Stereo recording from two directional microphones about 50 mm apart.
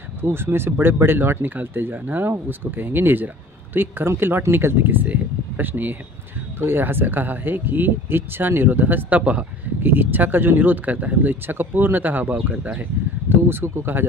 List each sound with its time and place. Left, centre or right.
0.2 s speech: right
9.2 s speech: right
9.8 s speech: right
11.4 s speech: right
13.3 s speech: right